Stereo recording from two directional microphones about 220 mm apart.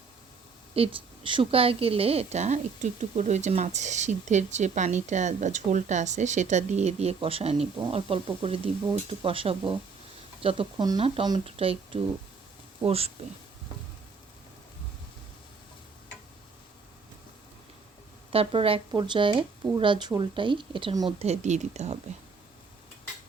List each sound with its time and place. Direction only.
0.8 s a woman's voice: 25° right (ahead or behind)
18.3 s speech: 25° right (ahead or behind)
21.2 s a woman's voice: 30° right (ahead or behind)